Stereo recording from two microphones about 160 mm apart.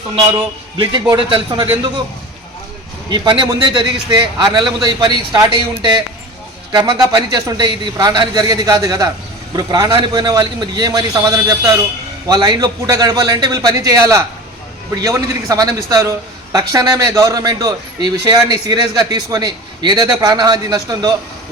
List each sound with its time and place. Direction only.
1.1 s speech: 30° right (ahead or behind)
3.1 s a man's voice: 30° right (ahead or behind)